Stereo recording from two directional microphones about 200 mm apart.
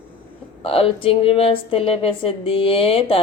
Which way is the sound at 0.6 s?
30° left (ahead or behind).